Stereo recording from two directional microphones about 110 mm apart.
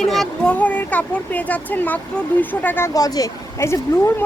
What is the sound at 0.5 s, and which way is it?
Speech, 15° left (ahead or behind).